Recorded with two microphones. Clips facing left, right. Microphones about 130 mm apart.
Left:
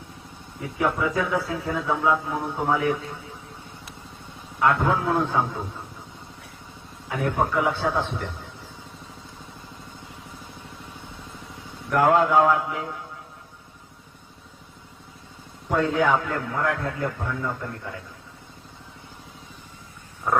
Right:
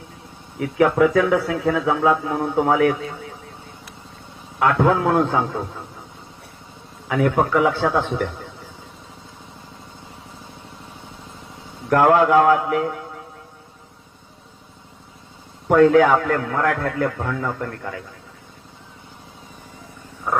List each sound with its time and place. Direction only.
0.6 s speech: 80° right
4.6 s a man's voice: 85° right
7.1 s a man's voice: 85° right
11.9 s a man's voice: 75° right (ahead or behind)
15.7 s speech: 75° right (ahead or behind)